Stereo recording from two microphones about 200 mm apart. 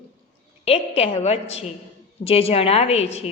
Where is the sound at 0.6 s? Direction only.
30° left (ahead or behind).